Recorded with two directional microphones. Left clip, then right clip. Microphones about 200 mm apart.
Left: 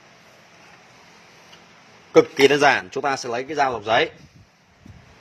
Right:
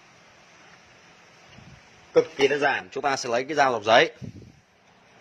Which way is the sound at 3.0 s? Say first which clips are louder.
Left 2 dB; centre (ahead or behind).